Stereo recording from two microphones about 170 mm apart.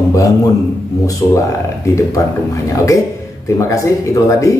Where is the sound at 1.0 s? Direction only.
20° left (ahead or behind).